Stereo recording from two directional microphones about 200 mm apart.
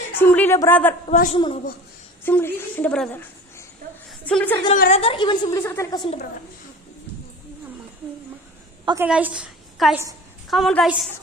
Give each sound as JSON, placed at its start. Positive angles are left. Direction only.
{"t": 0.2, "sound": "a woman's voice", "side_deg": 10}
{"t": 1.0, "sound": "a man's voice", "side_deg": 35}
{"t": 2.2, "sound": "a woman's voice", "side_deg": 10}
{"t": 4.3, "sound": "a woman's voice", "side_deg": 5}
{"t": 4.7, "sound": "a woman's voice", "side_deg": 35}
{"t": 8.8, "sound": "a woman's voice", "side_deg": -15}